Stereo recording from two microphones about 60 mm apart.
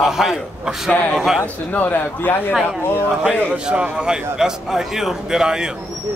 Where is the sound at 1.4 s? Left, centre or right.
Left.